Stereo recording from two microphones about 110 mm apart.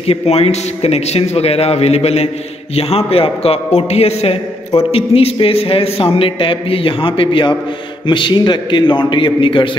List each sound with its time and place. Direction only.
0.1 s a man's voice: 70° left (ahead or behind); by 9.7 s 50° left (ahead or behind)